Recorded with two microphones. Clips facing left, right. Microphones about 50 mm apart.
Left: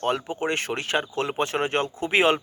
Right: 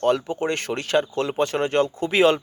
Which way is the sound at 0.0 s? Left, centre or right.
Centre.